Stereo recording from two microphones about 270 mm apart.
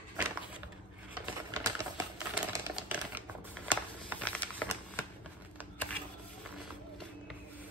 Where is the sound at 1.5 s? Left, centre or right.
Centre.